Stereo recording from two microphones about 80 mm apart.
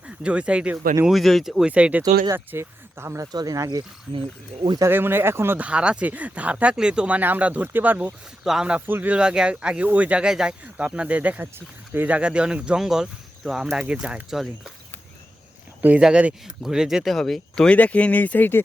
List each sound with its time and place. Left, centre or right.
0.2 s speech: centre
1.1 s speech: centre
1.7 s speech: centre
2.3 s speech: right
3.3 s speech: right
4.9 s speech: right
5.5 s speech: centre
8.4 s speech: centre
8.9 s speech: right; by 13.7 s centre
13.7 s speech: centre
16.0 s speech: centre; by 18.6 s left